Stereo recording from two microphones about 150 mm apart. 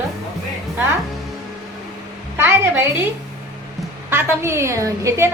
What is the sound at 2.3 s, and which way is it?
Speech, 15° right (ahead or behind).